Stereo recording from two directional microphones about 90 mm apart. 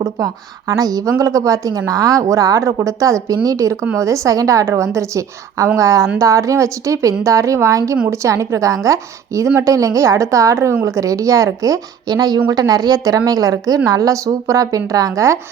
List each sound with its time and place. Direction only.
0.7 s a woman's voice: 40° right (ahead or behind)